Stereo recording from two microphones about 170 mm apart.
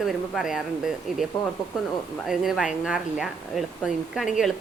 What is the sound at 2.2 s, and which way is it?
Speech, centre (ahead or behind).